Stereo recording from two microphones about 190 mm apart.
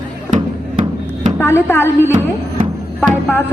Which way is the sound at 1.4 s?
10° left (ahead or behind).